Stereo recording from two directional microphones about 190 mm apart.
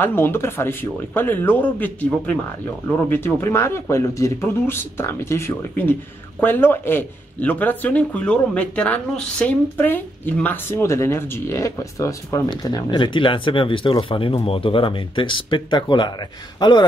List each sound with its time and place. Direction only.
0.0 s a man's voice: 10° left (ahead or behind)